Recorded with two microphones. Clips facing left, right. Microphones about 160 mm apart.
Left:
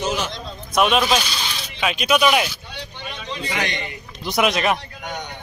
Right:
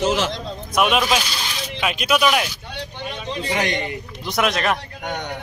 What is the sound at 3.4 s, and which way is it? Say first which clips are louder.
Speech: right 4 dB; 40° right (ahead or behind).